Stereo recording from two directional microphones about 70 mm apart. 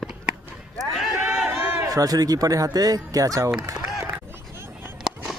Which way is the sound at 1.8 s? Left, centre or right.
Right.